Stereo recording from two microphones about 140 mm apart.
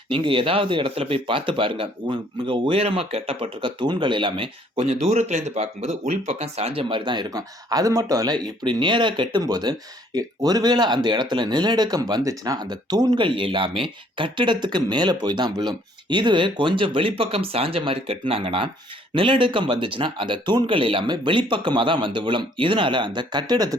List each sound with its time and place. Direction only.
0.1 s speech: 40° right (ahead or behind)